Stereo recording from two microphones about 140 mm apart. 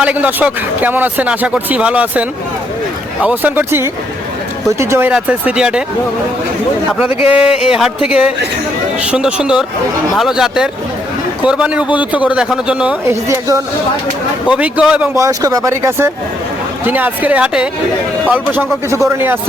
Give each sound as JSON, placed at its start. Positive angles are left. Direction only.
{"t": 0.0, "sound": "speech", "side_deg": -10}
{"t": 7.3, "sound": "speech", "side_deg": -5}
{"t": 13.1, "sound": "speech", "side_deg": -20}
{"t": 14.4, "sound": "speech", "side_deg": -10}
{"t": 15.1, "sound": "speech", "side_deg": -25}